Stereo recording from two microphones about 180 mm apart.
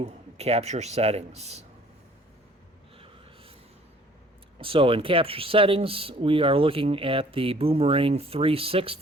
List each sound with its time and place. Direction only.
0.0 s speech: 35° right (ahead or behind)
4.6 s speech: 30° right (ahead or behind)